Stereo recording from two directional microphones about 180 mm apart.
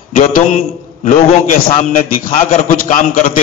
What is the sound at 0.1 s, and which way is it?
A man's voice, 50° left (ahead or behind).